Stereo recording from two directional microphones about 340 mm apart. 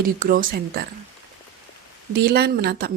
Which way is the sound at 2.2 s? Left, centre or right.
Right.